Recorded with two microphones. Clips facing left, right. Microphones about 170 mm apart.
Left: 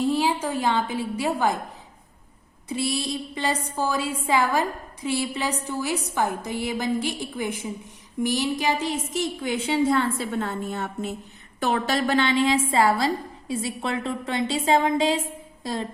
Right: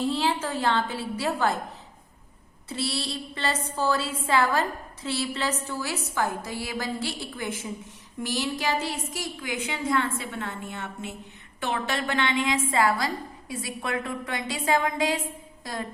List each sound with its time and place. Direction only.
0.0 s a woman's voice: 10° left (ahead or behind)
2.6 s a woman's voice: 15° left (ahead or behind)